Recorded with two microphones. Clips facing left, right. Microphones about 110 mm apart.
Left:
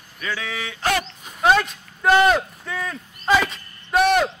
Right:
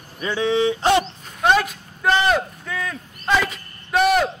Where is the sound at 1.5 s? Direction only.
5° right (ahead or behind).